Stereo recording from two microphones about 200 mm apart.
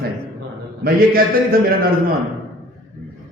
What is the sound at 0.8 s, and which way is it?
Speech, 45° right (ahead or behind).